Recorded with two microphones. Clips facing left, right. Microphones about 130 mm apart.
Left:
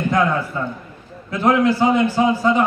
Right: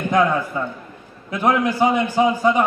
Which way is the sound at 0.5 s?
15° right (ahead or behind).